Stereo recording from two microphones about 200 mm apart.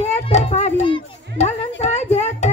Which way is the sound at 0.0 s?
35° left (ahead or behind).